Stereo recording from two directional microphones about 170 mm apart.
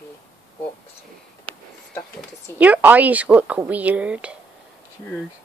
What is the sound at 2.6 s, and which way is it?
A woman's voice, 10° right (ahead or behind).